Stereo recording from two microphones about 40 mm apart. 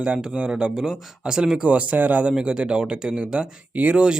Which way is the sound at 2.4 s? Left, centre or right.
Right.